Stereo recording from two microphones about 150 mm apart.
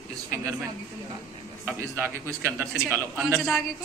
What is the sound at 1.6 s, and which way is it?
A man's voice, 15° right (ahead or behind).